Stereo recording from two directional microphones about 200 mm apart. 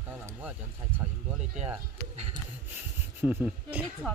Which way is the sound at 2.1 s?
30° right (ahead or behind).